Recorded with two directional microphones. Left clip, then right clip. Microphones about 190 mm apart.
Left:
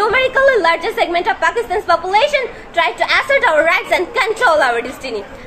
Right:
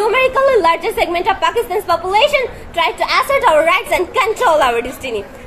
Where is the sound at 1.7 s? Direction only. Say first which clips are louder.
Left 1 dB; 40° right (ahead or behind).